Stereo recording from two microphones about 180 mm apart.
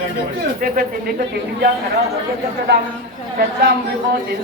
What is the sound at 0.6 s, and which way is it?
Speech, 60° right (ahead or behind).